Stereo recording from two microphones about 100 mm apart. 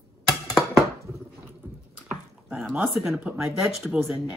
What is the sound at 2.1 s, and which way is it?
Dog, 5° right (ahead or behind).